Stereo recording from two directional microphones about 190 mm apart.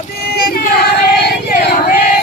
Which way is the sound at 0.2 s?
50° left (ahead or behind).